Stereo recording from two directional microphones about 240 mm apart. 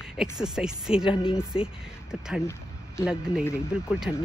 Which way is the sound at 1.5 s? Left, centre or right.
Left.